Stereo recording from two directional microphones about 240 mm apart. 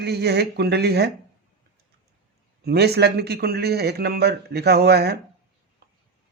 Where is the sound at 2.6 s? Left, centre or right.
Right.